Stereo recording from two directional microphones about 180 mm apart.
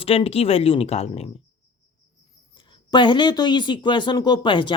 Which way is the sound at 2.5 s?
25° left (ahead or behind).